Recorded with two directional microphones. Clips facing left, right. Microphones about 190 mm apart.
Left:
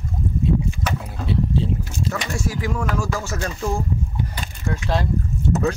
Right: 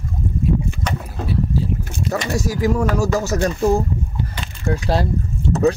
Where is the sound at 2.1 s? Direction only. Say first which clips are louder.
Right 6 dB; 40° right (ahead or behind).